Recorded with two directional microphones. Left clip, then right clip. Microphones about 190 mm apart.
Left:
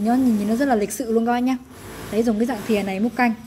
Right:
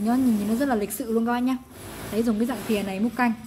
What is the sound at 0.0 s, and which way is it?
A woman's voice, 15° left (ahead or behind).